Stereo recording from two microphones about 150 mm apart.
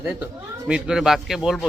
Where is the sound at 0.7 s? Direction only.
5° right (ahead or behind).